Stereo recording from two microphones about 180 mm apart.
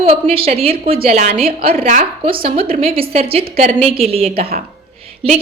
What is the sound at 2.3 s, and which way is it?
A woman's voice, 30° right (ahead or behind).